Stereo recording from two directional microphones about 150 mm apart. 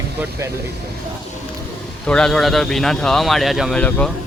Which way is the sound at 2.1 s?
5° left (ahead or behind).